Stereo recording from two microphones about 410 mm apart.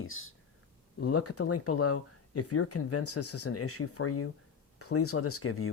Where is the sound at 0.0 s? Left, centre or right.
Left.